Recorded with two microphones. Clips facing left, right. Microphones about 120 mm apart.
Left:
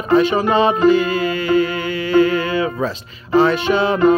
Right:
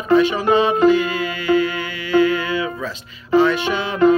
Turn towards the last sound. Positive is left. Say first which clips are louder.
# left 3 dB
turn(degrees=40)  # may be behind; listen again after turning